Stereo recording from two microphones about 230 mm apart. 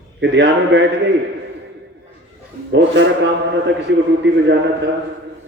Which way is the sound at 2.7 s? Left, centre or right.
Right.